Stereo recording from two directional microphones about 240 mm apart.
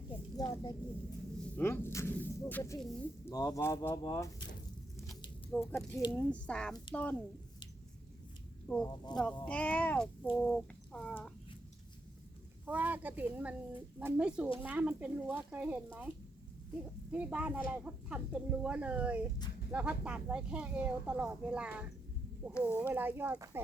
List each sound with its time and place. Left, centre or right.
0.3 s a sound: centre
1.4 s speech: centre
5.0 s a sound: centre
5.7 s speech: centre
8.6 s speech: centre
12.6 s speech: centre
17.1 s speech: centre
22.5 s speech: centre
22.9 s speech: centre